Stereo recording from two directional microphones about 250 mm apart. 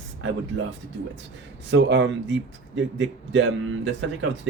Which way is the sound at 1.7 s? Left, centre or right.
Right.